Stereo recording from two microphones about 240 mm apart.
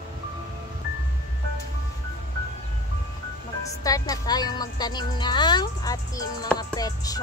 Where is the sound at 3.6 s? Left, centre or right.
Centre.